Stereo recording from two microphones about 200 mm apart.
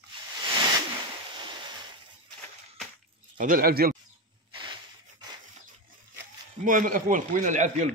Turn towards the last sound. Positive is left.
turn(degrees=-40)  # may be behind; listen again after turning